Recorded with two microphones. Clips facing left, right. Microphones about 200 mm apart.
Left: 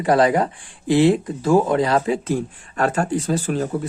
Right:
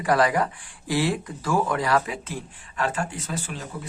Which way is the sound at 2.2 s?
45° left (ahead or behind).